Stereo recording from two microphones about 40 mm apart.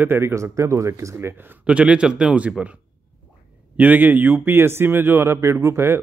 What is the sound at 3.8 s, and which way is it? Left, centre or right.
Speech, right.